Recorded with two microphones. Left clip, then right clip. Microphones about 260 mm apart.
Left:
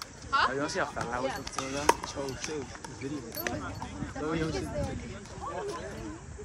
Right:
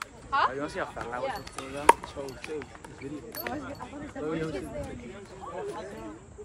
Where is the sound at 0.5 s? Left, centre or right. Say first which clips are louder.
Left 2 dB; left.